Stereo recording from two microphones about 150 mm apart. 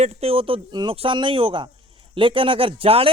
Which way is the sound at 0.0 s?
45° right (ahead or behind).